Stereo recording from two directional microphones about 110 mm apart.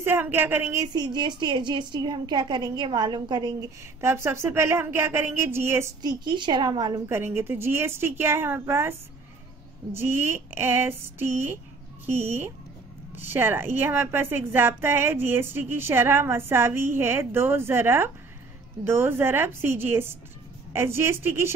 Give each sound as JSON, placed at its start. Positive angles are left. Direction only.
{"t": 0.0, "sound": "a woman's voice", "side_deg": -20}
{"t": 0.9, "sound": "a woman's voice", "side_deg": -40}
{"t": 4.0, "sound": "a woman's voice", "side_deg": -20}
{"t": 6.0, "sound": "a woman's voice", "side_deg": -45}
{"t": 7.1, "sound": "a woman's voice", "side_deg": -20}
{"t": 9.9, "sound": "a woman's voice", "side_deg": -20}